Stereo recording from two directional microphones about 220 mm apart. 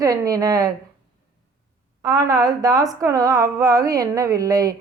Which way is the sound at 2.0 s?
15° right (ahead or behind).